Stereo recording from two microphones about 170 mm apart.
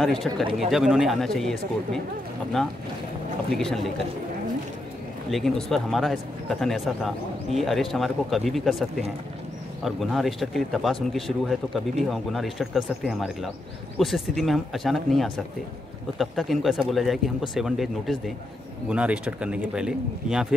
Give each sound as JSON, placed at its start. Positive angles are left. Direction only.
{"t": 0.0, "sound": "speech", "side_deg": 0}
{"t": 0.4, "sound": "speech", "side_deg": -30}
{"t": 0.7, "sound": "speech", "side_deg": 0}
{"t": 3.5, "sound": "speech", "side_deg": 0}
{"t": 5.3, "sound": "speech", "side_deg": 0}